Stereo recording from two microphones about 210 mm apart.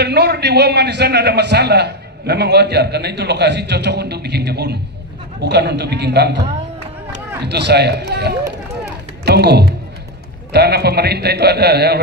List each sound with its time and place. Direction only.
0.0 s a man's voice: 50° right (ahead or behind)
7.4 s a man's voice: 55° right (ahead or behind)